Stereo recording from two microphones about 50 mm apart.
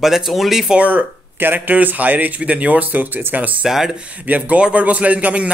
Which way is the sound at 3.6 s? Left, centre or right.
Centre.